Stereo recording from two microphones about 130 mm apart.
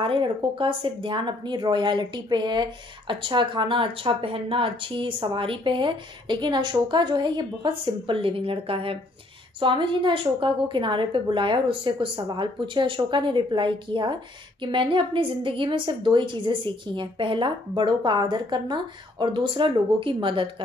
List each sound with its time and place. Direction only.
0.0 s speech: 40° right (ahead or behind)